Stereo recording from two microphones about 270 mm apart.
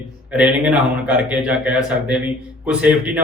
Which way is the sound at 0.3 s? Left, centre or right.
Centre.